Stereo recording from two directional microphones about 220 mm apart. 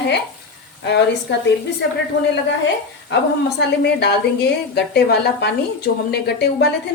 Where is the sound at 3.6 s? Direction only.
50° left (ahead or behind).